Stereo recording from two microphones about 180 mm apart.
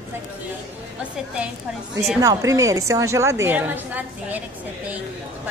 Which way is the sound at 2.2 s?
20° right (ahead or behind).